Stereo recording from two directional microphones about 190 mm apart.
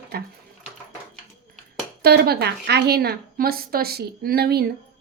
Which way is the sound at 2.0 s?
55° right (ahead or behind).